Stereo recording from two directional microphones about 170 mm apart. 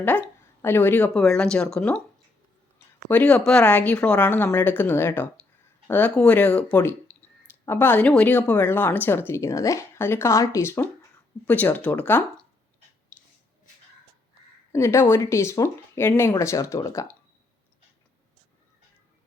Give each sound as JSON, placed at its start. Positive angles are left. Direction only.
{"t": 0.0, "sound": "speech", "side_deg": 10}
{"t": 3.1, "sound": "speech", "side_deg": 10}
{"t": 14.7, "sound": "speech", "side_deg": 15}